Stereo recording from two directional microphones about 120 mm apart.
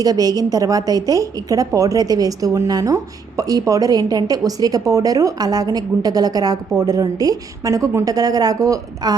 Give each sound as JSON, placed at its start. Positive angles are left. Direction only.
{"t": 0.0, "sound": "a woman's voice", "side_deg": -30}